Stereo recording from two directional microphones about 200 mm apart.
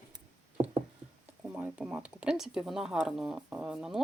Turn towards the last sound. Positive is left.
turn(degrees=0)  # may be behind; listen again after turning